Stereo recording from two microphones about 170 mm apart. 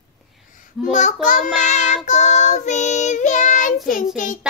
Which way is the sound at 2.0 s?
45° left (ahead or behind).